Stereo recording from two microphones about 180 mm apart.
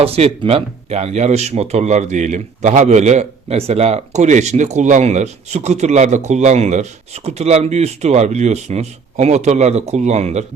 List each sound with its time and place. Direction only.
0.0 s speech: 35° right (ahead or behind)